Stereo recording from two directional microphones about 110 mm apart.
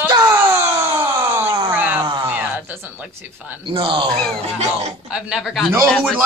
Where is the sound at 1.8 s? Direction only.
15° right (ahead or behind).